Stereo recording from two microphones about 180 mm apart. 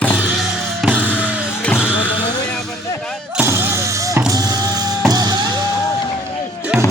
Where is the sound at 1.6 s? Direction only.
10° left (ahead or behind).